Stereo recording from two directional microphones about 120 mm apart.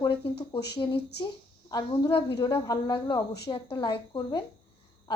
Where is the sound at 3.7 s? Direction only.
40° left (ahead or behind).